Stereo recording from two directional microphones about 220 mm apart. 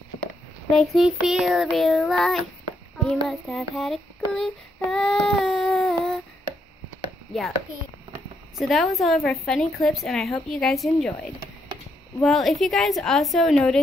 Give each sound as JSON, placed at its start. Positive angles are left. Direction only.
{"t": 0.7, "sound": "a woman's voice", "side_deg": 0}
{"t": 4.9, "sound": "child singing", "side_deg": 5}
{"t": 8.5, "sound": "a woman's voice", "side_deg": 0}
{"t": 12.2, "sound": "a woman's voice", "side_deg": 0}